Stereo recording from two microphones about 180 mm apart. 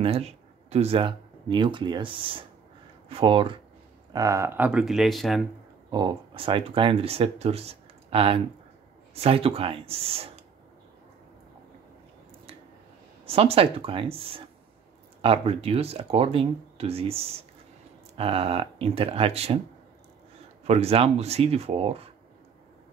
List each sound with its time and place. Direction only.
0.0 s speech: 35° right (ahead or behind)
4.1 s speech: 20° right (ahead or behind); by 5.4 s centre (ahead or behind)
5.9 s speech: 25° right (ahead or behind)
13.2 s speech: 35° right (ahead or behind)
20.6 s speech: 35° right (ahead or behind)